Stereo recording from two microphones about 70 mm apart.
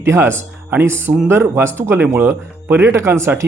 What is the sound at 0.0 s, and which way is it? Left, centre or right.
Speech, right.